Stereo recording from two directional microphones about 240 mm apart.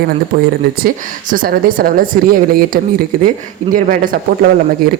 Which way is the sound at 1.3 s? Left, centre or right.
Right.